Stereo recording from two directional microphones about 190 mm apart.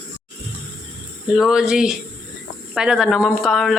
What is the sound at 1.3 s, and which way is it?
Music, centre (ahead or behind).